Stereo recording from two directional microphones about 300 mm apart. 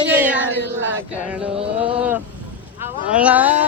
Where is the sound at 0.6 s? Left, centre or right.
Right.